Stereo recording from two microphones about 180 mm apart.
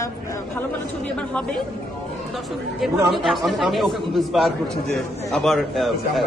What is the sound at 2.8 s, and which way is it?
Speech, centre (ahead or behind).